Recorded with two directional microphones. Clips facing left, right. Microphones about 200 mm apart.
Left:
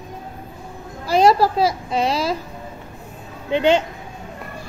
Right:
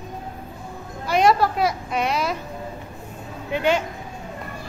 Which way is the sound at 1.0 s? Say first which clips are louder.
Left 3 dB; 35° left (ahead or behind).